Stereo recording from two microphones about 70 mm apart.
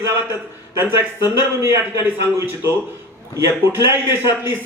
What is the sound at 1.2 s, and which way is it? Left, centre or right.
Speech, left.